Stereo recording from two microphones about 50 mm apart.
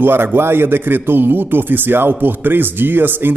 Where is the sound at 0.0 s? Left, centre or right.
Right.